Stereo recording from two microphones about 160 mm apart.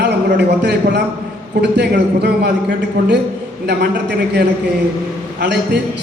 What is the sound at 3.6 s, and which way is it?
Speech, 90° right.